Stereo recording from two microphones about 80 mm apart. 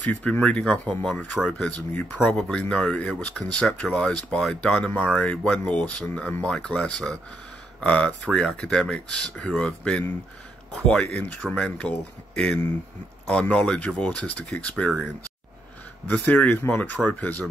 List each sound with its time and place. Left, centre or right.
0.1 s speech: centre
16.1 s speech: centre